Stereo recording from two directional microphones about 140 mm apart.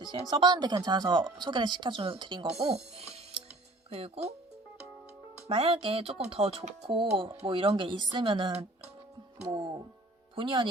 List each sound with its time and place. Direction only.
0.3 s speech: 30° right (ahead or behind)
2.5 s speech: 45° right (ahead or behind)
5.5 s speech: 40° right (ahead or behind)
10.3 s speech: 35° right (ahead or behind)